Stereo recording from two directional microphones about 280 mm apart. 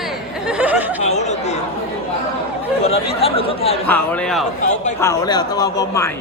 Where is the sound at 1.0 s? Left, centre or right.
Left.